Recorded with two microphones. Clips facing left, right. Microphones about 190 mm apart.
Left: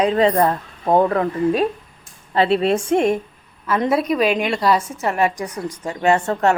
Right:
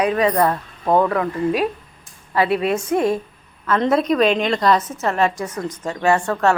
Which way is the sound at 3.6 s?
10° left (ahead or behind).